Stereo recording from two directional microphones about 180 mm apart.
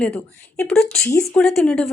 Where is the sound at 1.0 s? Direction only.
15° left (ahead or behind).